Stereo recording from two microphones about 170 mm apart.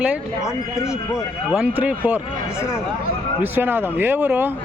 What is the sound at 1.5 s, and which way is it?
Speech, 5° right (ahead or behind).